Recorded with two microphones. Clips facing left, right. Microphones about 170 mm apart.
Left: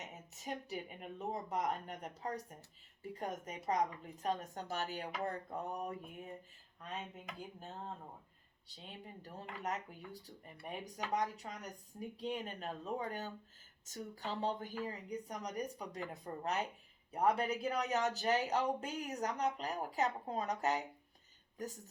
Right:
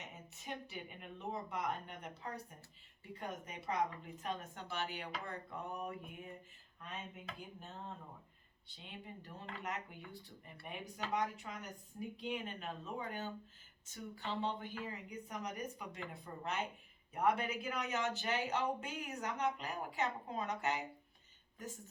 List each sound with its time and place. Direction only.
0.0 s speech: 40° left (ahead or behind)
8.6 s speech: 40° left (ahead or behind)